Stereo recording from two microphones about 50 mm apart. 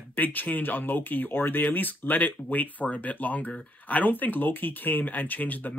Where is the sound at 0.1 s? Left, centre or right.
Left.